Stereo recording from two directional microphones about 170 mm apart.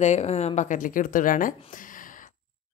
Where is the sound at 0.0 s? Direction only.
40° left (ahead or behind).